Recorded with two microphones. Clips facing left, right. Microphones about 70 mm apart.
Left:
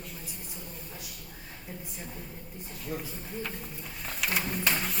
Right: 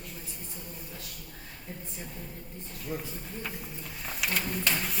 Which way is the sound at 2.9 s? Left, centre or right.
Centre.